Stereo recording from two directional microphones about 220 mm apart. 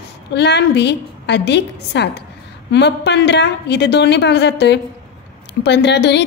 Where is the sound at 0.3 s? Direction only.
50° left (ahead or behind).